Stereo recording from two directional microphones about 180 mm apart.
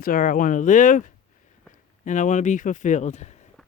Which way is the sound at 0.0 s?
50° left (ahead or behind).